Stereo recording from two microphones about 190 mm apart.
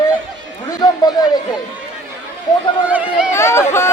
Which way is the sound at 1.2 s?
20° left (ahead or behind).